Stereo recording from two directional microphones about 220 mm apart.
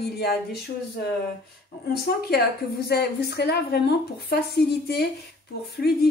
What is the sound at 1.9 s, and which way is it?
A woman's voice, 45° left (ahead or behind).